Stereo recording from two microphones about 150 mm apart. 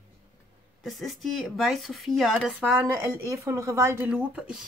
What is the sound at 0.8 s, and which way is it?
Speech, centre (ahead or behind).